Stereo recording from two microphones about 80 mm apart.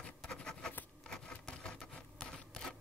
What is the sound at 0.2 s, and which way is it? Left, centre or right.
Writing, centre.